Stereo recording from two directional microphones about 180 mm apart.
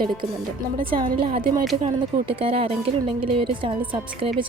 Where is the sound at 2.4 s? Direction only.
30° right (ahead or behind).